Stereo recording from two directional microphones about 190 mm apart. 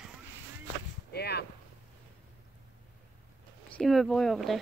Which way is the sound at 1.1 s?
60° left (ahead or behind).